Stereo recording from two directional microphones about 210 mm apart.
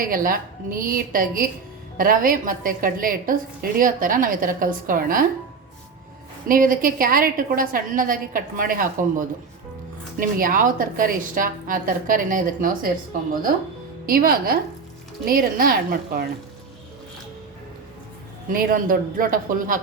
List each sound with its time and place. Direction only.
0.0 s a woman's voice: 40° right (ahead or behind)
6.5 s a woman's voice: 40° right (ahead or behind)
14.1 s a woman's voice: 45° right (ahead or behind)
18.5 s a woman's voice: 40° right (ahead or behind)